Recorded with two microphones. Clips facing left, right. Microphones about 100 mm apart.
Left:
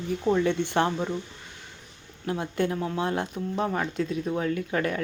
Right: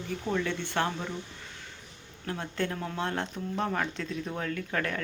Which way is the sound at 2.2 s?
15° left (ahead or behind).